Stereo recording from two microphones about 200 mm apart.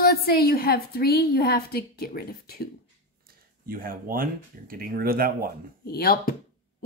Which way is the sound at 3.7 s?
45° right (ahead or behind).